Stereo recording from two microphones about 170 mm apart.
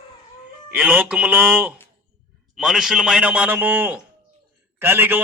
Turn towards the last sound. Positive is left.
turn(degrees=-10)  # may be behind; listen again after turning